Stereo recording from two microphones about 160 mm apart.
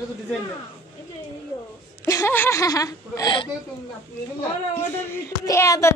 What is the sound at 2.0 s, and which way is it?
Speech, 15° left (ahead or behind).